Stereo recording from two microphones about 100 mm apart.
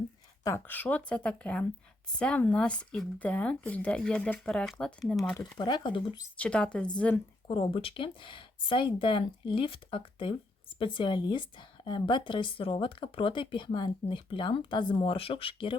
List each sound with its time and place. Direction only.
0.7 s speech: 15° left (ahead or behind)
5.5 s speech: 45° left (ahead or behind)
6.3 s speech: 10° left (ahead or behind)
7.4 s speech: 65° left (ahead or behind)